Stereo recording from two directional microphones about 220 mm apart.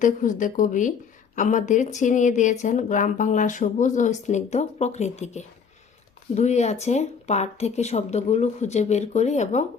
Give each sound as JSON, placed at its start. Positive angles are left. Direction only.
{"t": 0.0, "sound": "speech", "side_deg": 35}